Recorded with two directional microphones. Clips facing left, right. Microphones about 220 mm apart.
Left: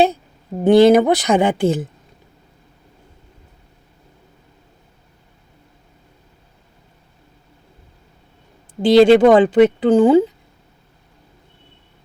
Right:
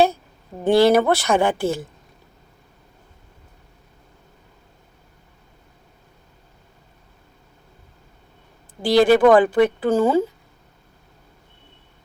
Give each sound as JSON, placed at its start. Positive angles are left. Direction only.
{"t": 0.6, "sound": "speech", "side_deg": 20}
{"t": 8.8, "sound": "speech", "side_deg": 25}